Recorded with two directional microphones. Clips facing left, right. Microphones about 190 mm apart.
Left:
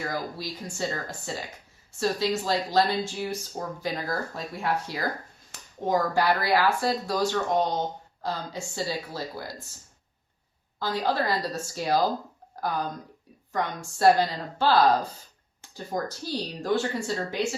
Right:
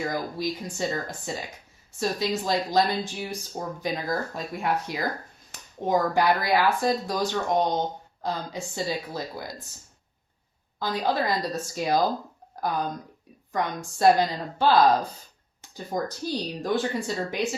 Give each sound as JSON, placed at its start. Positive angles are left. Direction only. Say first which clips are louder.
{"t": 0.0, "sound": "speech", "louder": "right 4 dB", "side_deg": -20}
{"t": 10.8, "sound": "speech", "louder": "right 1 dB", "side_deg": -15}
{"t": 14.0, "sound": "speech", "louder": "right 1 dB", "side_deg": -15}